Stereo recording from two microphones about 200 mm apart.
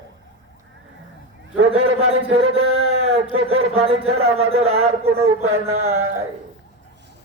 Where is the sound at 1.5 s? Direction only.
90° right.